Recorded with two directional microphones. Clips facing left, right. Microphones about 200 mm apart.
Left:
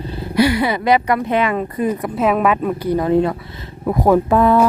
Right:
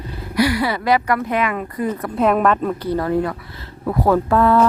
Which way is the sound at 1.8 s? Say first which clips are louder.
Even; 10° left (ahead or behind).